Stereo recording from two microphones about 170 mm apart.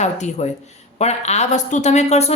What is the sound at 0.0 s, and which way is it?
A woman's voice, 40° left (ahead or behind).